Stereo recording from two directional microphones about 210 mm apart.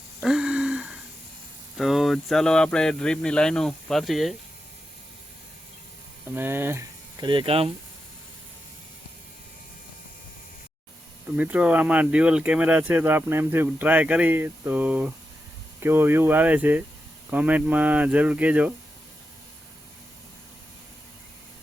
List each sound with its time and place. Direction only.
0.2 s a sound: centre (ahead or behind)
1.8 s speech: centre (ahead or behind)
6.3 s speech: 10° right (ahead or behind); by 7.7 s 25° right (ahead or behind)
11.3 s speech: 5° right (ahead or behind)